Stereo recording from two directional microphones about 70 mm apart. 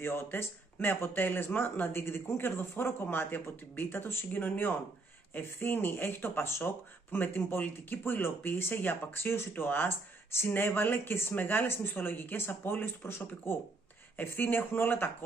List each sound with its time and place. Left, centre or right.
0.0 s speech: left